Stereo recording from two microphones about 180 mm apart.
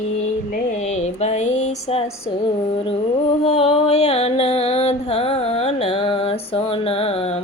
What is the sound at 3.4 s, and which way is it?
Music, 35° left (ahead or behind).